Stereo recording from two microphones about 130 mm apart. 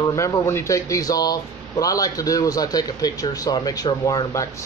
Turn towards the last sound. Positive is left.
turn(degrees=25)  # may be behind; listen again after turning